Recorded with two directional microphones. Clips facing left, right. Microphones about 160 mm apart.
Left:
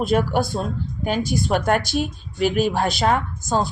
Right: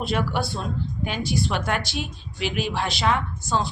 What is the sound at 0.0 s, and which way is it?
A woman's voice, 45° left (ahead or behind).